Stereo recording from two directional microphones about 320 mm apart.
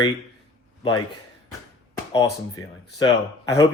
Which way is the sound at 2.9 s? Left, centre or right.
Centre.